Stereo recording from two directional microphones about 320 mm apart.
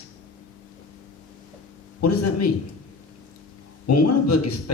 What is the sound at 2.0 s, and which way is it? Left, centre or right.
Speech, left.